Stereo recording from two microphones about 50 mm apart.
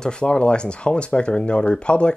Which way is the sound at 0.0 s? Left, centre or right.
Centre.